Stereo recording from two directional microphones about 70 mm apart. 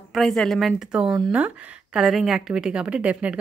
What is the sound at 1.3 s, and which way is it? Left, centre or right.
Speech, centre.